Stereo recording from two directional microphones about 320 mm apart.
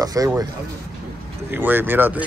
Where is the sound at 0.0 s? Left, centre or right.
Centre.